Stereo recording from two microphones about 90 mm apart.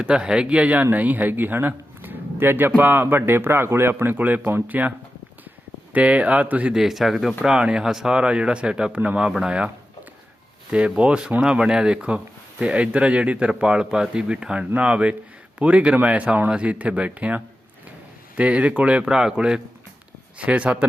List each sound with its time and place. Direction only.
0.0 s a man's voice: 10° right (ahead or behind)
6.7 s speech: 5° right (ahead or behind)